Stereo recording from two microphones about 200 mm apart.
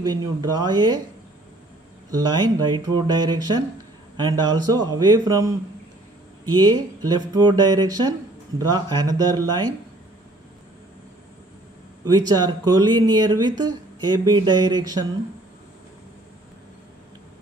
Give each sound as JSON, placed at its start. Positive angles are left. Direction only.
{"t": 0.0, "sound": "speech", "side_deg": -20}
{"t": 2.0, "sound": "speech", "side_deg": -20}
{"t": 12.0, "sound": "speech", "side_deg": -20}